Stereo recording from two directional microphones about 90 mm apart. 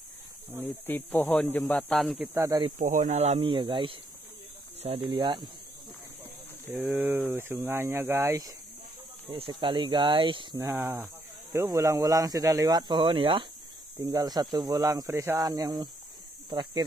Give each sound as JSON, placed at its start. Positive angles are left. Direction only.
{"t": 0.8, "sound": "a man's voice", "side_deg": 20}
{"t": 2.3, "sound": "speech", "side_deg": -35}
{"t": 3.3, "sound": "speech", "side_deg": -75}
{"t": 4.8, "sound": "speech", "side_deg": -80}
{"t": 6.7, "sound": "speech", "side_deg": -15}
{"t": 9.5, "sound": "speech", "side_deg": -65}
{"t": 10.6, "sound": "speech", "side_deg": -35}
{"t": 13.9, "sound": "speech", "side_deg": -45}